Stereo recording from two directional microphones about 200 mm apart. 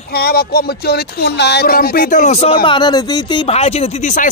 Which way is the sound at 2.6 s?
25° left (ahead or behind).